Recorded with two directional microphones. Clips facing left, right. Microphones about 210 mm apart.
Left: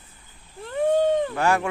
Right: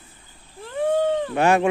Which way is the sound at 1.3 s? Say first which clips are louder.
Right 4 dB; 20° right (ahead or behind).